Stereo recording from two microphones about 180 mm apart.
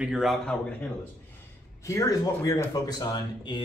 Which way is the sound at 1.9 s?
20° left (ahead or behind).